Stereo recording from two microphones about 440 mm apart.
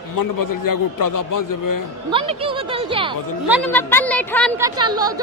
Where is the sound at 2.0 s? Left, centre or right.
Centre.